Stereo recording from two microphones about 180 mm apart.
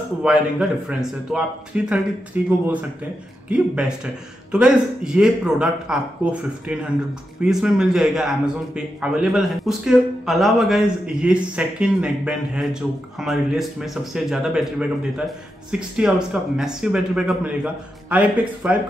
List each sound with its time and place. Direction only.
0.2 s a man's voice: 5° right (ahead or behind)